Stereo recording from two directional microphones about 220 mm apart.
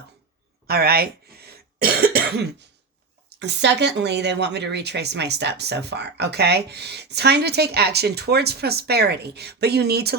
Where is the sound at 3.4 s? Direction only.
50° right (ahead or behind).